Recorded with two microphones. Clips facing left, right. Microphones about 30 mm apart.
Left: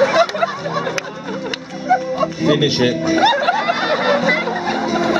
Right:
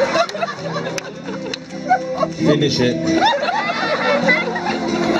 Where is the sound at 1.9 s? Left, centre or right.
Centre.